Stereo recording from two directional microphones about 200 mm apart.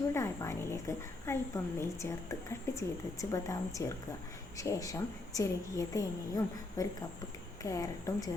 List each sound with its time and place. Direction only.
0.1 s a woman's voice: 15° left (ahead or behind)